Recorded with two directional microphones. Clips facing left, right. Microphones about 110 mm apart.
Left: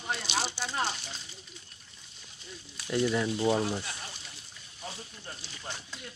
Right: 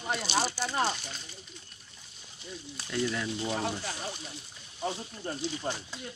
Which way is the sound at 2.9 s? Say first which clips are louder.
Left 4 dB; 20° left (ahead or behind).